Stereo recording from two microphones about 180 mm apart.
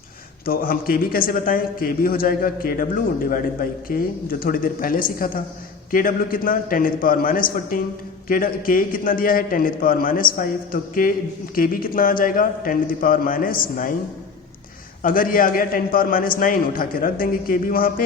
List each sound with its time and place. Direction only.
0.4 s a man's voice: 55° left (ahead or behind)
15.0 s a man's voice: 50° left (ahead or behind)